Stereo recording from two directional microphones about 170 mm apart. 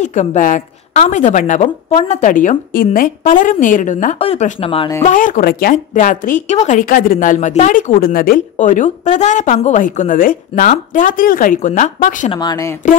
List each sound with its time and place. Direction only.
0.0 s a woman's voice: 45° left (ahead or behind)
5.0 s speech: 50° left (ahead or behind)
12.3 s speech: 25° left (ahead or behind)